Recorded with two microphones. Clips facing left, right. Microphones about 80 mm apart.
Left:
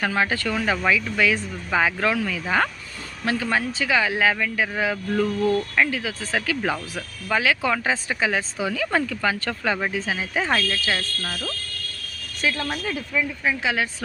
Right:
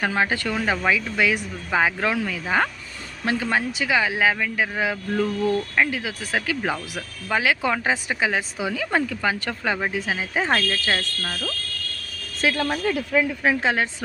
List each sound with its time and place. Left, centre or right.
0.0 s speech: right
5.1 s speech: centre
5.7 s speech: centre
11.2 s speech: centre
12.4 s speech: right
13.6 s a woman's voice: right